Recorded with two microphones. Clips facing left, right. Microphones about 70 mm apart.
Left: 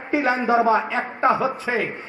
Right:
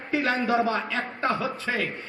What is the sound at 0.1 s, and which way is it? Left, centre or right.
A man's voice, centre.